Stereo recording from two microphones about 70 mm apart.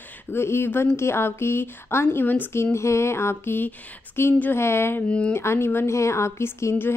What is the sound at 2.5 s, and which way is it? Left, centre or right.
A woman's voice, left.